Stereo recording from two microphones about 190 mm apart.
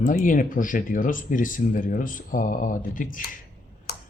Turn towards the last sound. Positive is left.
turn(degrees=60)  # may be behind; listen again after turning